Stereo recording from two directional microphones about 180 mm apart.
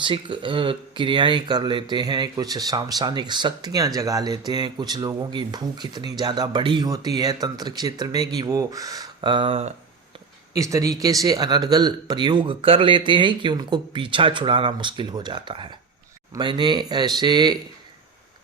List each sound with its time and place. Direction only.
0.0 s speech: 25° right (ahead or behind)
10.5 s speech: 20° right (ahead or behind)